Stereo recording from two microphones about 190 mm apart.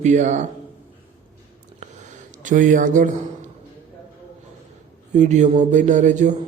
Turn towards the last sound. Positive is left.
turn(degrees=-40)  # may be behind; listen again after turning